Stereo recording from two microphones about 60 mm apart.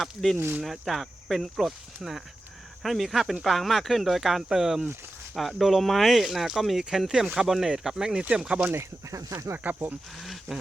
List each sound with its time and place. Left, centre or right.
0.0 s speech: centre
9.0 s speech: right
10.2 s speech: centre